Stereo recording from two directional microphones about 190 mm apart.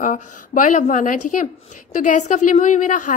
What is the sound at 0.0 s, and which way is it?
A woman's voice, 40° left (ahead or behind).